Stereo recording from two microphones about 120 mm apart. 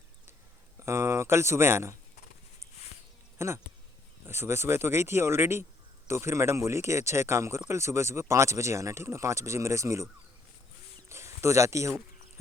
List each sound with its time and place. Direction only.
0.8 s speech: 25° right (ahead or behind)
3.3 s speech: 20° right (ahead or behind)
11.1 s speech: 20° right (ahead or behind)